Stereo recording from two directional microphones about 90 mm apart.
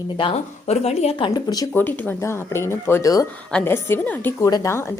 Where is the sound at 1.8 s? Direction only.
20° left (ahead or behind).